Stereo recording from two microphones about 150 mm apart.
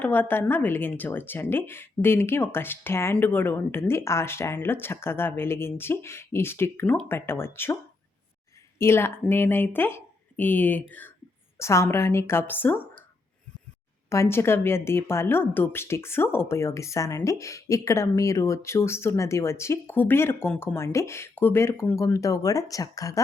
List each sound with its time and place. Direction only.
0.0 s a woman's voice: 15° left (ahead or behind)
8.8 s a woman's voice: 15° left (ahead or behind)
14.1 s a woman's voice: 15° left (ahead or behind)